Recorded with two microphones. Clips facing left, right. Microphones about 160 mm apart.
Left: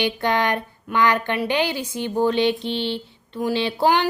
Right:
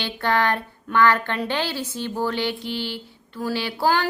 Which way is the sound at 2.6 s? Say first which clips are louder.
Left 4 dB; 25° left (ahead or behind).